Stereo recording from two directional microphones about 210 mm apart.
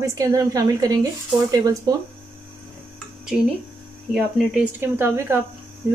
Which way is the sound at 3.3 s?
Centre (ahead or behind).